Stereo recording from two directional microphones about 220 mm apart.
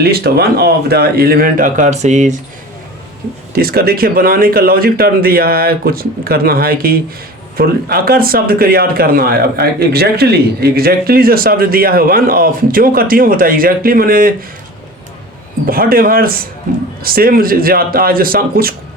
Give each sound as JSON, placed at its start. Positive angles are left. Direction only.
{"t": 0.0, "sound": "speech", "side_deg": -45}
{"t": 3.5, "sound": "speech", "side_deg": -45}
{"t": 15.6, "sound": "speech", "side_deg": -40}